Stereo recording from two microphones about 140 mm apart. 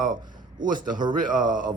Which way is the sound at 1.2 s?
70° right (ahead or behind).